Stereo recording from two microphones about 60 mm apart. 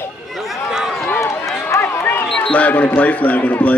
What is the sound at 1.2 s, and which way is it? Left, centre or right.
Run, left.